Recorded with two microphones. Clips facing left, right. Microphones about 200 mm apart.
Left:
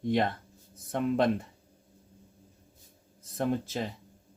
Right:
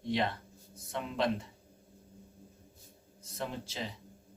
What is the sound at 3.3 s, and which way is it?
Speech, 50° left (ahead or behind).